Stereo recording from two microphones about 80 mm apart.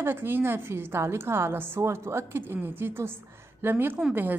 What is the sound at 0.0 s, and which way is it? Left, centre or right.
A woman's voice, right.